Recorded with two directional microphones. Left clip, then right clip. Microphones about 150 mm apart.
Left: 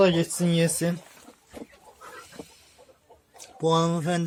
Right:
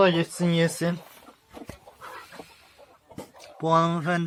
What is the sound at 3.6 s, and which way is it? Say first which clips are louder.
Speech: right 1 dB; 15° left (ahead or behind).